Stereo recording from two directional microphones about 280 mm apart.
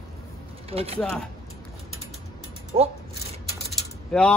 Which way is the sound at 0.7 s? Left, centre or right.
Right.